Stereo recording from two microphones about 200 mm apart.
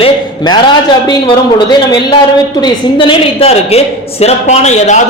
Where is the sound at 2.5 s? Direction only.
25° left (ahead or behind).